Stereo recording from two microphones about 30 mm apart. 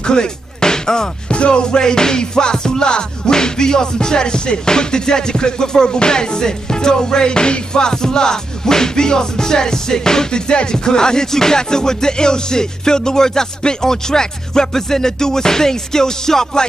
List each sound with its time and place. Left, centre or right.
0.0 s music: left
1.3 s music: left; by 16.6 s centre